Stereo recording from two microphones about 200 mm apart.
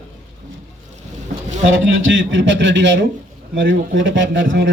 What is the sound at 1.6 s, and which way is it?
A man's voice, 70° right (ahead or behind).